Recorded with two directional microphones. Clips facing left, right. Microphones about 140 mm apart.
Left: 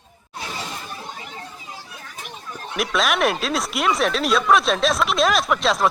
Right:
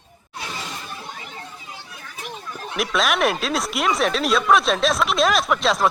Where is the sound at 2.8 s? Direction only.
Centre (ahead or behind).